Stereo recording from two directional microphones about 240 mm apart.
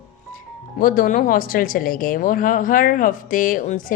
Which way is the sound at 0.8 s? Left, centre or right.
Left.